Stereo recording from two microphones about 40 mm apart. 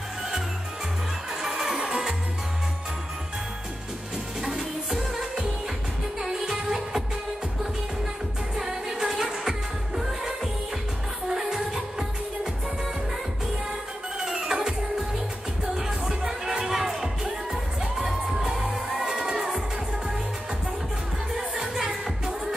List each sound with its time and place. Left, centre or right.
1.4 s music: centre
4.4 s music: centre
6.4 s music: centre
8.5 s music: centre
14.2 s music: centre
16.1 s music: centre
21.4 s music: centre